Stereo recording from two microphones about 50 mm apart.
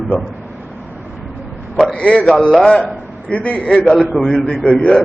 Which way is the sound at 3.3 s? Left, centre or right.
Left.